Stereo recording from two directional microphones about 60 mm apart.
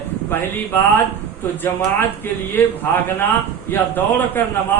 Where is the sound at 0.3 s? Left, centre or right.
Left.